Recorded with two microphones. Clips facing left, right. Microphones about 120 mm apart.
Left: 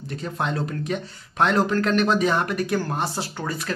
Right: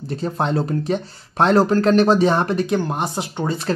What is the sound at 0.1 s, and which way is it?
Speech, 35° right (ahead or behind).